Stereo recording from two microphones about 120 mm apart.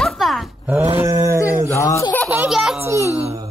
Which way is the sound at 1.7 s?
25° left (ahead or behind).